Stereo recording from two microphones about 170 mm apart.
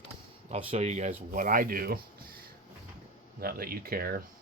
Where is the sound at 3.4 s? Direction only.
60° right (ahead or behind).